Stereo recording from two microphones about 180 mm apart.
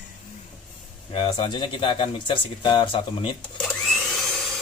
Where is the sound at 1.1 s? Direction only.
30° left (ahead or behind).